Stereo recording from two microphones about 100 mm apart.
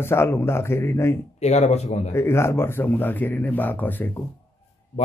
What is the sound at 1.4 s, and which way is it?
Speech, 90° left.